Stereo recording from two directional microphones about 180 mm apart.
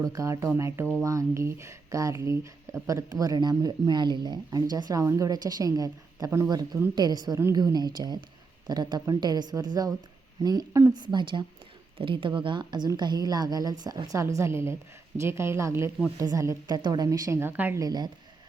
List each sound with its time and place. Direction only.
0.0 s speech: 20° right (ahead or behind)